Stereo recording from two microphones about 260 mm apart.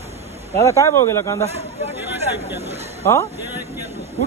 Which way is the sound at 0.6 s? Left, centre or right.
Centre.